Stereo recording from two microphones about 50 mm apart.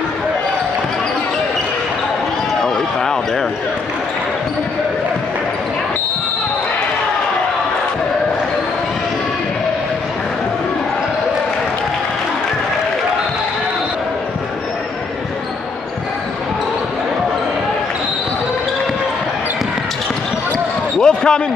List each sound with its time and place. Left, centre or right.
2.6 s basketball bounce: centre
21.0 s basketball bounce: centre